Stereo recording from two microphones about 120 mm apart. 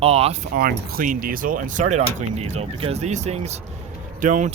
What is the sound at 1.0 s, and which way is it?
Speech, 90° right.